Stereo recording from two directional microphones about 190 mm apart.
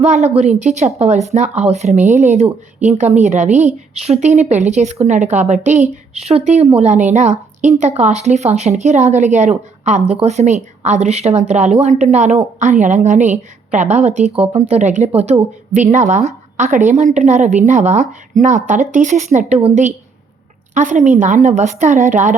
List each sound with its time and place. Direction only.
0.0 s speech: 35° right (ahead or behind)